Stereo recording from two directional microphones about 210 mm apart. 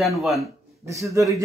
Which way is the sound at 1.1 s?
15° right (ahead or behind).